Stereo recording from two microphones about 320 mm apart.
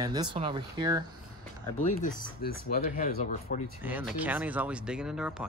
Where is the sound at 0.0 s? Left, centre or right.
Centre.